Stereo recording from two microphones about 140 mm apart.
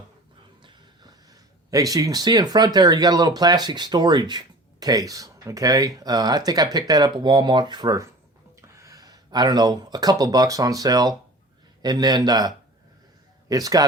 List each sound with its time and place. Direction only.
0.6 s speech: 30° right (ahead or behind)